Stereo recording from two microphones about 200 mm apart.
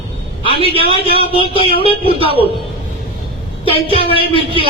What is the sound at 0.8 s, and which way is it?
A man's voice, 30° left (ahead or behind).